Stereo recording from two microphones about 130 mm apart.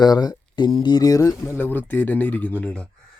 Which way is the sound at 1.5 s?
15° left (ahead or behind).